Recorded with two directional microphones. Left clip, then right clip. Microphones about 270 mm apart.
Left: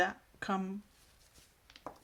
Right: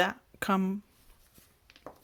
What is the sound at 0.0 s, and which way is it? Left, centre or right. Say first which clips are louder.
Speech: right 4 dB; right.